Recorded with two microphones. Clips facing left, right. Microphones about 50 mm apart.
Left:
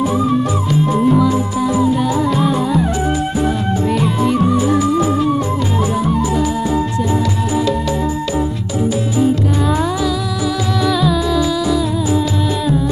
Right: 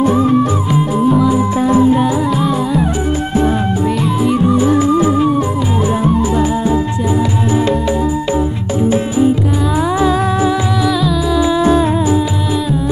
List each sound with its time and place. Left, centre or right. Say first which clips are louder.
0.7 s music: right 1 dB; centre
1.6 s music: right 5 dB; right
2.3 s music: even; centre
3.9 s music: right 1 dB; centre
4.6 s music: right 3 dB; right
8.8 s music: right 3 dB; right
11.0 s music: even; centre
11.3 s music: right 3 dB; right